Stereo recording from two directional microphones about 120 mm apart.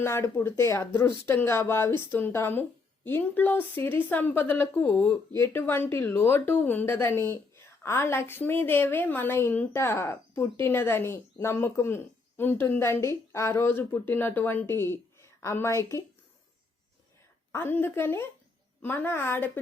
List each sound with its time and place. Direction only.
0.0 s a woman's voice: 20° left (ahead or behind)
17.5 s a woman's voice: 20° left (ahead or behind)